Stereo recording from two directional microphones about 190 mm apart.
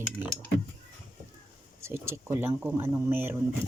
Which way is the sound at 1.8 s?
15° right (ahead or behind).